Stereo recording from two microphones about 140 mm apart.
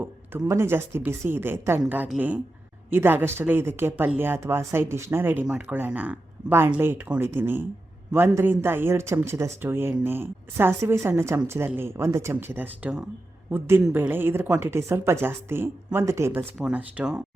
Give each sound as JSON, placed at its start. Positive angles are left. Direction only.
{"t": 0.0, "sound": "speech", "side_deg": -15}